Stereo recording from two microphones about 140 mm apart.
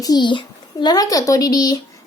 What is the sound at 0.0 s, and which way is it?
A child's voice, 30° left (ahead or behind).